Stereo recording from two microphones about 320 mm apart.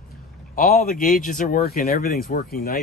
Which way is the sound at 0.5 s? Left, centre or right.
Left.